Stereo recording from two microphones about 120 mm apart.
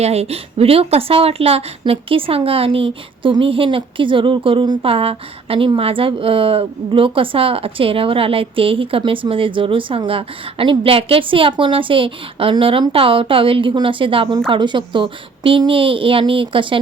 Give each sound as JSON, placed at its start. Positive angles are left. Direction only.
{"t": 0.0, "sound": "a woman's voice", "side_deg": -60}